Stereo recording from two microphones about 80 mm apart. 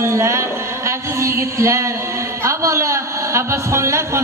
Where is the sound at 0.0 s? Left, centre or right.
Right.